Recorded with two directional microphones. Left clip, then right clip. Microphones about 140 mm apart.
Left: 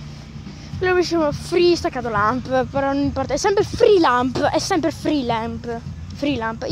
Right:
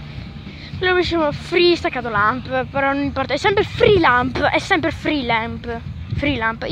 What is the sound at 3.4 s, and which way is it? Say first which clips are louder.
Speech: even; 10° left (ahead or behind).